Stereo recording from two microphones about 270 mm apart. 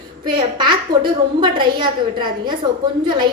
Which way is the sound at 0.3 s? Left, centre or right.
Centre.